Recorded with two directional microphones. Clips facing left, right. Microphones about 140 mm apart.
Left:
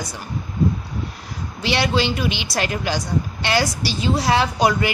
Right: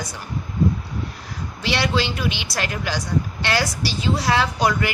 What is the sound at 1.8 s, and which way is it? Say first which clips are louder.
A woman's voice: left 2 dB; 20° left (ahead or behind).